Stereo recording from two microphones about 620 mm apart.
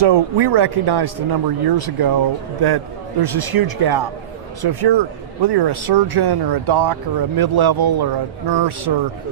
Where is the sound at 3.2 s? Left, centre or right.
Right.